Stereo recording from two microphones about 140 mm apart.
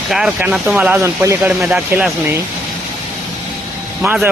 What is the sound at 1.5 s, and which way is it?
Speech, 5° right (ahead or behind).